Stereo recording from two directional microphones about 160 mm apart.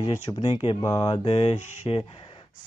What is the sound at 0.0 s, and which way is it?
Speech, 25° left (ahead or behind).